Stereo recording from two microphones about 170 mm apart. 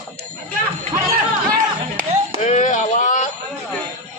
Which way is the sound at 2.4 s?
45° left (ahead or behind).